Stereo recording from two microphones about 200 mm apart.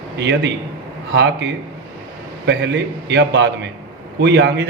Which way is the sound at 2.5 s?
60° right (ahead or behind).